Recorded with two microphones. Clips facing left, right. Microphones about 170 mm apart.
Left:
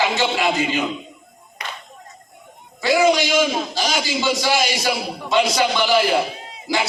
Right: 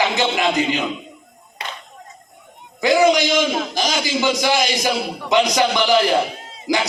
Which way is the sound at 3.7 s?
15° right (ahead or behind).